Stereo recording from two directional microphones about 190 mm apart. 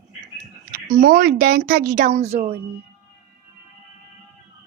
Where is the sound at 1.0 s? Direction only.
50° right (ahead or behind); by 2.6 s 35° right (ahead or behind).